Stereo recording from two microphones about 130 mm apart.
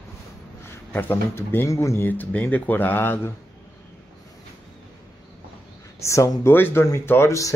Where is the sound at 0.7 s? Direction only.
20° left (ahead or behind).